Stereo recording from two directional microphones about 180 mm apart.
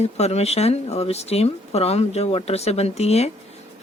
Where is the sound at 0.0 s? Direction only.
35° left (ahead or behind).